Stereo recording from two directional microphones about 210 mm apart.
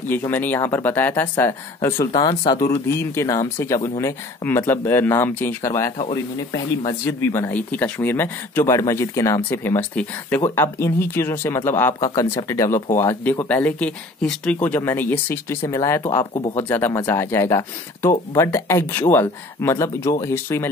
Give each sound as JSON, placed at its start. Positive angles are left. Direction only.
{"t": 0.1, "sound": "speech", "side_deg": 10}